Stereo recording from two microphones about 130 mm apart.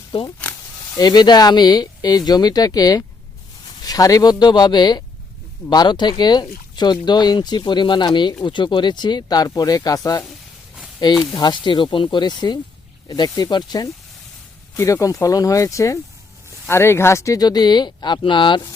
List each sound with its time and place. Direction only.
0.1 s speech: 45° left (ahead or behind)
0.9 s speech: 30° left (ahead or behind)